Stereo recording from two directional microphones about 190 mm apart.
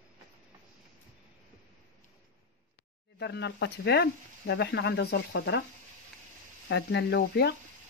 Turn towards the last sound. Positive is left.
turn(degrees=60)  # may be behind; listen again after turning